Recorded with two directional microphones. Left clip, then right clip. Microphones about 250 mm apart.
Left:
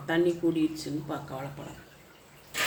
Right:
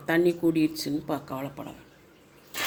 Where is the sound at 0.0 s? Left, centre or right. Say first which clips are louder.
Right 3 dB; right.